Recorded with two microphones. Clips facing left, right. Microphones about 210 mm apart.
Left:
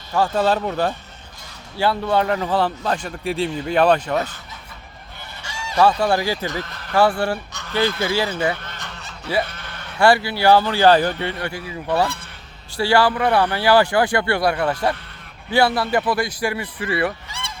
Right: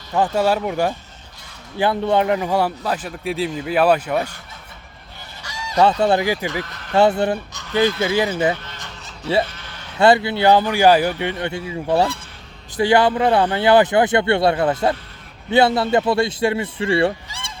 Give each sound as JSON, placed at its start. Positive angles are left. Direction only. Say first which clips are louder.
{"t": 0.1, "sound": "speech", "louder": "right 1 dB", "side_deg": -15}
{"t": 5.4, "sound": "goose", "louder": "right 1 dB", "side_deg": 25}
{"t": 5.7, "sound": "speech", "louder": "right 1 dB", "side_deg": -20}
{"t": 8.6, "sound": "goose", "louder": "left 1 dB", "side_deg": 65}
{"t": 10.0, "sound": "speech", "louder": "right 2 dB", "side_deg": -20}
{"t": 17.2, "sound": "fowl", "louder": "left 2 dB", "side_deg": 60}